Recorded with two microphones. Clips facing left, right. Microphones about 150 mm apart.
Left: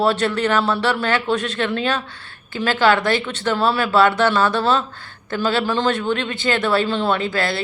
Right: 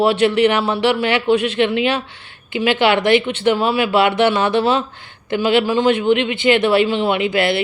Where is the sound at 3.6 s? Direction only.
15° right (ahead or behind).